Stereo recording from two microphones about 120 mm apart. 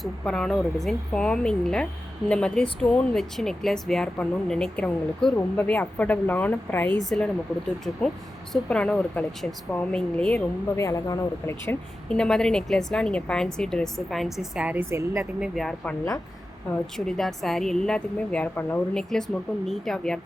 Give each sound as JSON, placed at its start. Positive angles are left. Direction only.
{"t": 0.0, "sound": "a woman's voice", "side_deg": 5}
{"t": 8.5, "sound": "speech", "side_deg": 10}
{"t": 10.8, "sound": "speech", "side_deg": 25}
{"t": 12.0, "sound": "a woman's voice", "side_deg": 5}
{"t": 15.4, "sound": "a woman's voice", "side_deg": 0}
{"t": 17.1, "sound": "a woman's voice", "side_deg": 0}
{"t": 19.6, "sound": "a woman's voice", "side_deg": 0}